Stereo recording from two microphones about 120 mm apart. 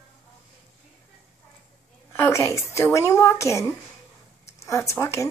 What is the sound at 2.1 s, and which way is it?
Speech, 20° left (ahead or behind).